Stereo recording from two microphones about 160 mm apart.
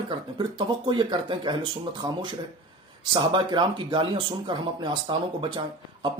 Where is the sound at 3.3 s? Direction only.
30° right (ahead or behind).